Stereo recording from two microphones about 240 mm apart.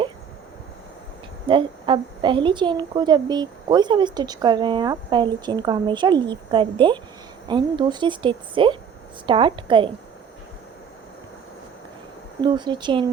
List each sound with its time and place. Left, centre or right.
1.5 s a woman's voice: right
12.4 s a woman's voice: centre